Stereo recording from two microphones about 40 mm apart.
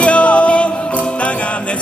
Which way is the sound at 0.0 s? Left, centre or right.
Left.